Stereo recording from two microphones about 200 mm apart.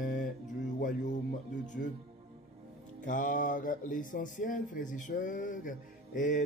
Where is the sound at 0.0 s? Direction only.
40° left (ahead or behind).